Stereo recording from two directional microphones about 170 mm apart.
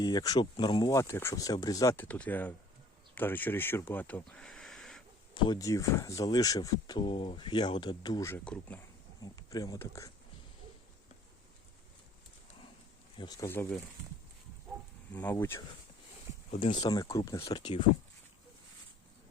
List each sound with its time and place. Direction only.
0.0 s speech: 20° left (ahead or behind); by 5.0 s centre (ahead or behind)
5.3 s speech: 30° left (ahead or behind)
8.3 s speech: 10° left (ahead or behind)
9.2 s speech: 20° left (ahead or behind)
13.1 s speech: 25° left (ahead or behind)
15.1 s speech: 10° left (ahead or behind)
16.6 s speech: 30° left (ahead or behind)